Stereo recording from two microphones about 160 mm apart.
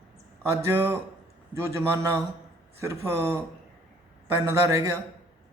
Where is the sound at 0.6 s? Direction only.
15° right (ahead or behind).